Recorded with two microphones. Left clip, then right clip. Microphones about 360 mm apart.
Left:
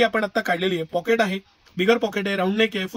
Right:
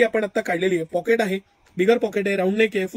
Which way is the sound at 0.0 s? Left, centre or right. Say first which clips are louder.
Even; left.